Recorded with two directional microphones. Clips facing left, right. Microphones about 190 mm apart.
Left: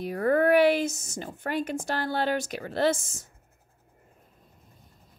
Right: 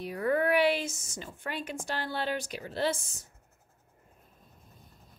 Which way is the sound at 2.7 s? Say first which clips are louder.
Left 6 dB; 80° left.